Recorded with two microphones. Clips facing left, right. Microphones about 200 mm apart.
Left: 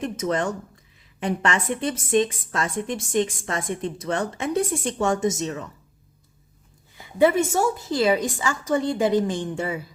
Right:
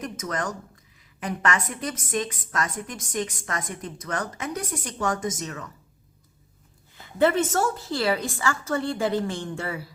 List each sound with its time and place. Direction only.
0.0 s a woman's voice: 30° left (ahead or behind)
6.9 s a woman's voice: 15° left (ahead or behind)